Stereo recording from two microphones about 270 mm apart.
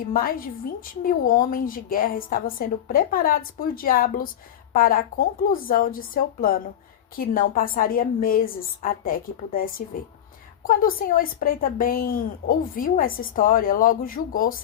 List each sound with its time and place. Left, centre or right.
0.0 s a woman's voice: left